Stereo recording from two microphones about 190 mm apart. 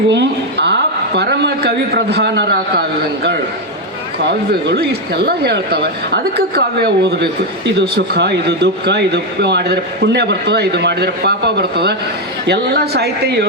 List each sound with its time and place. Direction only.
0.1 s a woman's voice: 65° right (ahead or behind)
4.3 s speech: 65° right (ahead or behind)